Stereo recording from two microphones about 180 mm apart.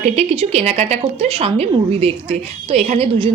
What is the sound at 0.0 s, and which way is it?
A woman's voice, 35° right (ahead or behind).